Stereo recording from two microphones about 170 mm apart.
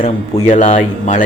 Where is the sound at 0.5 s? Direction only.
50° left (ahead or behind).